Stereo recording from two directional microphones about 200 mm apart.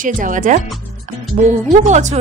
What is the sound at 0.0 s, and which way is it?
Speech, 40° right (ahead or behind).